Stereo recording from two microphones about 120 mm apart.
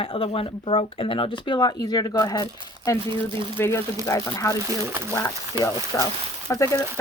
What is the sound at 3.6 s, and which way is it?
Speech, 20° left (ahead or behind).